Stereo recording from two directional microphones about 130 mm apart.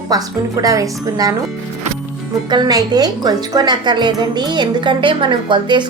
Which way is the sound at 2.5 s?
30° right (ahead or behind).